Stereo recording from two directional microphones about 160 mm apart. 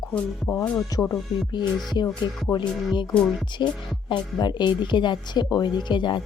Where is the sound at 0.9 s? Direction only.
20° left (ahead or behind).